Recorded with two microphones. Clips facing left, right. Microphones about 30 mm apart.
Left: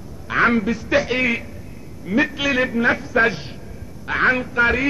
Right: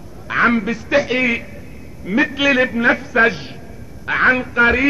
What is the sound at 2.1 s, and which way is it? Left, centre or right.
A man's voice, centre.